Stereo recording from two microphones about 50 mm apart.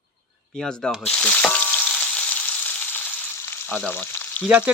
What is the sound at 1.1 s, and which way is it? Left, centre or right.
Speech, centre.